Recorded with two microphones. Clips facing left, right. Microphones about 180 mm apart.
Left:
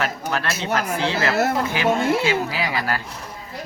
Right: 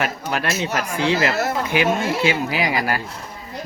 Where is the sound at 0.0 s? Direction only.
15° right (ahead or behind).